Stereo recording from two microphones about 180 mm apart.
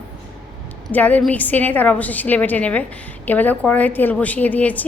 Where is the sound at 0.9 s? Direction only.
10° left (ahead or behind).